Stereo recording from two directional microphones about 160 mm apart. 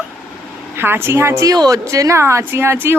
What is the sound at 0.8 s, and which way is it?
A woman's voice, 15° right (ahead or behind).